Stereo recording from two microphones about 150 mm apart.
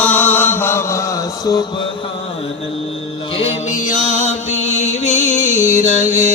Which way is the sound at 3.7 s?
55° left (ahead or behind).